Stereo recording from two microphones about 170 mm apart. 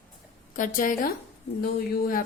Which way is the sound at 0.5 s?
50° left (ahead or behind).